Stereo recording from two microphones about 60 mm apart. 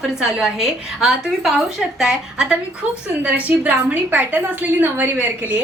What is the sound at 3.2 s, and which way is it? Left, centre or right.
A woman's voice, right.